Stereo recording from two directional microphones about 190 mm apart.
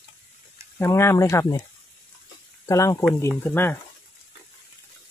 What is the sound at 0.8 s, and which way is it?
Speech, 15° left (ahead or behind).